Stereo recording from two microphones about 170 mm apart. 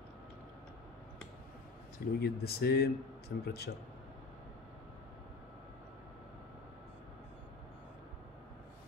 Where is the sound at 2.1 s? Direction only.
70° left (ahead or behind).